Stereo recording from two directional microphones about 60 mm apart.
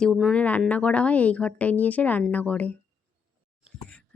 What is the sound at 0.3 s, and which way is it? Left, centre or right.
A woman's voice, left.